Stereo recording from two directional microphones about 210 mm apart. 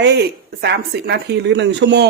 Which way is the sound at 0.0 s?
55° right (ahead or behind).